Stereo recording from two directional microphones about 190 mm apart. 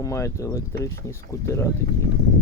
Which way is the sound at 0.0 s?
15° left (ahead or behind).